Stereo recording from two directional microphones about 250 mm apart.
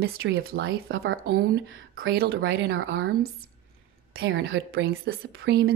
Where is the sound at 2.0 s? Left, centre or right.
Right.